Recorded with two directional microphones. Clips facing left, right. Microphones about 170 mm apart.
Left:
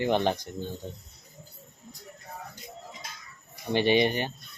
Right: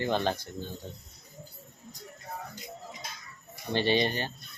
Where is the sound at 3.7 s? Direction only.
15° left (ahead or behind).